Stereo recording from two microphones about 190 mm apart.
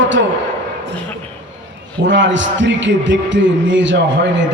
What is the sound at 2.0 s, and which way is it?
A man's voice, 75° right (ahead or behind).